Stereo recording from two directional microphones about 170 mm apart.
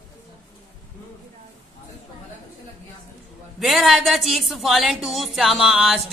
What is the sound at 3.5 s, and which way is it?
A woman's voice, centre (ahead or behind).